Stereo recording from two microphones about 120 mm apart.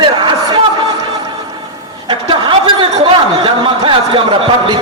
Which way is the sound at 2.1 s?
50° right (ahead or behind).